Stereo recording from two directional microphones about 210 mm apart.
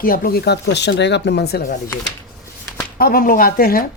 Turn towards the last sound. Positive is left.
turn(degrees=45)  # may be behind; listen again after turning